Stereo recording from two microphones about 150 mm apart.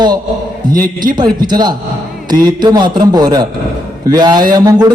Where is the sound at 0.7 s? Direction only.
65° right (ahead or behind).